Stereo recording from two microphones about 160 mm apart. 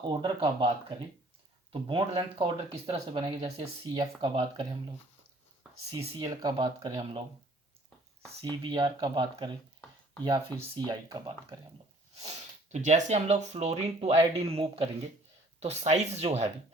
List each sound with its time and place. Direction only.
0.1 s speech: 30° right (ahead or behind)
5.9 s speech: 35° right (ahead or behind)
6.3 s speech: 25° right (ahead or behind)
8.4 s speech: 30° right (ahead or behind)
10.8 s speech: 25° right (ahead or behind)
12.1 s speech: 40° right (ahead or behind)